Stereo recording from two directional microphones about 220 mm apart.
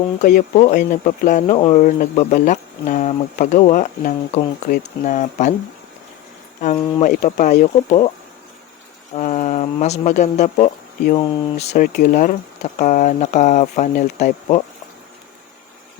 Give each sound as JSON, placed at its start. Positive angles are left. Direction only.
{"t": 0.2, "sound": "speech", "side_deg": 35}
{"t": 7.0, "sound": "speech", "side_deg": 35}
{"t": 9.1, "sound": "speech", "side_deg": 35}